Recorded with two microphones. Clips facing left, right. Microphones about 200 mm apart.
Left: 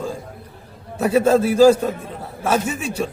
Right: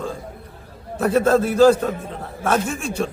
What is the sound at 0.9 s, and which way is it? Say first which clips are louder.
A man's voice: left 1 dB; 10° left (ahead or behind).